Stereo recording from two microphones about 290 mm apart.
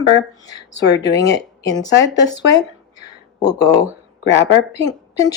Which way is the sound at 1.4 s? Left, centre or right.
Centre.